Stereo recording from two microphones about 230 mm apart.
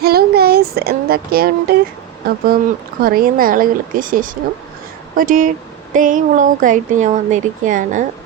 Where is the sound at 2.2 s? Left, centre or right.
Right.